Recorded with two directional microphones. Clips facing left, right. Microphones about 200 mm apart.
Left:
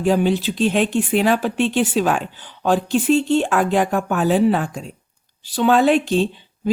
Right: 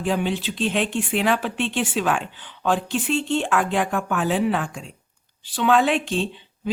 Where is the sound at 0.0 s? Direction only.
40° left (ahead or behind).